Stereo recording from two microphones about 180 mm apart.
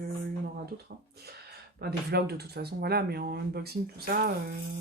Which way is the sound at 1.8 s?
60° right (ahead or behind).